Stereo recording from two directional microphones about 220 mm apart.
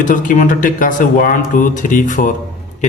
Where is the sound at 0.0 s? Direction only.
35° left (ahead or behind).